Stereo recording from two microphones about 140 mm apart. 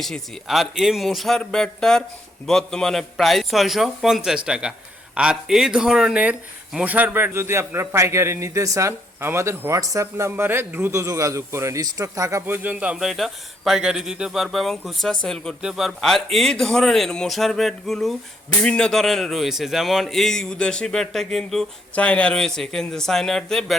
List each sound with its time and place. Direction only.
0.0 s a man's voice: centre (ahead or behind)